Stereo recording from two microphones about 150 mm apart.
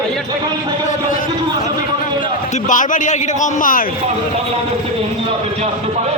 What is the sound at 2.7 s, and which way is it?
Speech, 60° left (ahead or behind).